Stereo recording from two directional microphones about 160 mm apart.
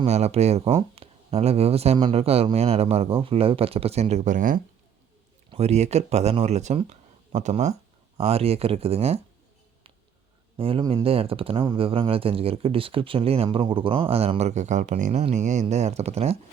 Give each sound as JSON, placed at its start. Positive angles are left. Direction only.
{"t": 0.0, "sound": "speech", "side_deg": -40}
{"t": 1.0, "sound": "a sound", "side_deg": -35}
{"t": 1.3, "sound": "speech", "side_deg": -40}
{"t": 5.5, "sound": "speech", "side_deg": -40}
{"t": 10.6, "sound": "speech", "side_deg": -30}